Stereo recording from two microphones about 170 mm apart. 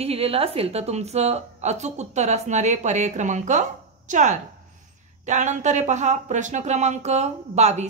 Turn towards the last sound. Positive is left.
turn(degrees=-40)  # may be behind; listen again after turning